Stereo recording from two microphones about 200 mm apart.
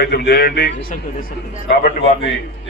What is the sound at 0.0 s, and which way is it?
Speech, 50° left (ahead or behind).